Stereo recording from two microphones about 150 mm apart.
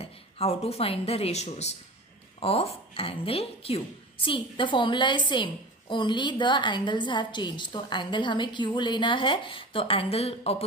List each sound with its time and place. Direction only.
0.0 s a woman's voice: 40° left (ahead or behind)